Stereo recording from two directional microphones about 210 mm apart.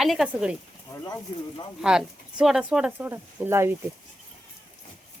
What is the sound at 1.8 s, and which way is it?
Speech, 5° right (ahead or behind).